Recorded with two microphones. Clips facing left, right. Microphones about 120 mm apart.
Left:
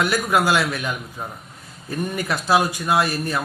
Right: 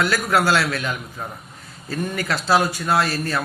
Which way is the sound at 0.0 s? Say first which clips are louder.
Even; 15° left (ahead or behind).